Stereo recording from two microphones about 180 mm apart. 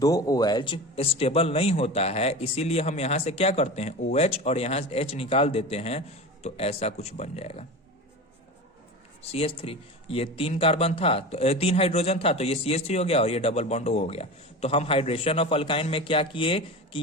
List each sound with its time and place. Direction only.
0.0 s speech: 20° left (ahead or behind)
9.3 s speech: 30° left (ahead or behind)